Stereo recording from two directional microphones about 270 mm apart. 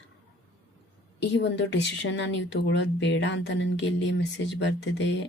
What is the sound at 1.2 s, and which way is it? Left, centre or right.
Speech, left.